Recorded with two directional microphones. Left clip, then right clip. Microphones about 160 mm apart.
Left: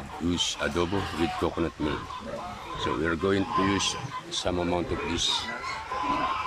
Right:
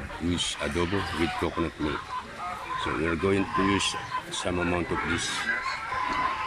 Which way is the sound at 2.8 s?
Centre (ahead or behind).